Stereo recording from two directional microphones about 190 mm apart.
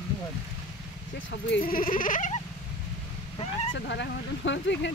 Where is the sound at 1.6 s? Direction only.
50° left (ahead or behind).